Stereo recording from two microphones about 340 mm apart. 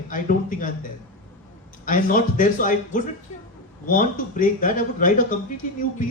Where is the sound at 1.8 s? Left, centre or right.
Left.